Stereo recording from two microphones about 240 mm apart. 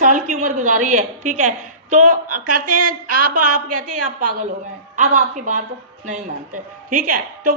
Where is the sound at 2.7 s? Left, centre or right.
Right.